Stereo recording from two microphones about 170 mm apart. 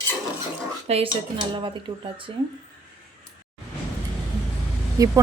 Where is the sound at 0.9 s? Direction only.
35° right (ahead or behind).